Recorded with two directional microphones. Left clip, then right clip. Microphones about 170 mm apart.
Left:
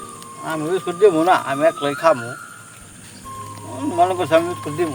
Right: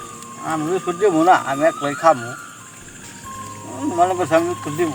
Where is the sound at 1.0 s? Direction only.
35° left (ahead or behind).